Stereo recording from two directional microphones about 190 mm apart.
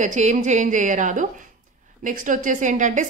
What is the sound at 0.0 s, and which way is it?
A woman's voice, 40° right (ahead or behind).